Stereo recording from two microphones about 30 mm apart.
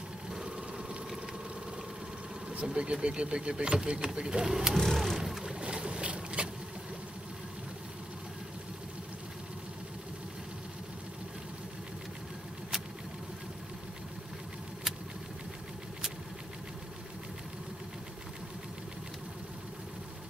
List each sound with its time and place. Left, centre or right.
2.6 s speech: right
4.7 s a sound: centre
5.1 s boat: centre
5.4 s boat: right